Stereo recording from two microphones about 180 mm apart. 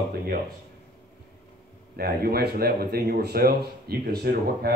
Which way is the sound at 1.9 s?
60° right (ahead or behind).